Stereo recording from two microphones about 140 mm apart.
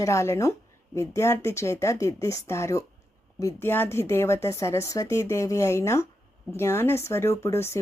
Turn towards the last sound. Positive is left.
turn(degrees=20)  # may be behind; listen again after turning